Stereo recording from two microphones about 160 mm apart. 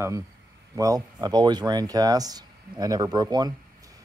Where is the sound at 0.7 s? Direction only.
20° right (ahead or behind).